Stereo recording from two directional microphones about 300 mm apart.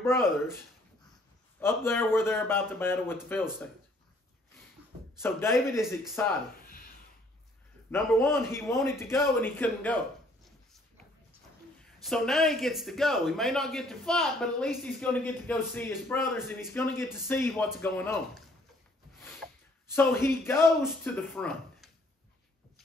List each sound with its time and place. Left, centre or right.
0.0 s a man's voice: centre
1.6 s a man's voice: centre
5.2 s a man's voice: centre
7.9 s a man's voice: centre
11.8 s a man's voice: centre
19.9 s a man's voice: centre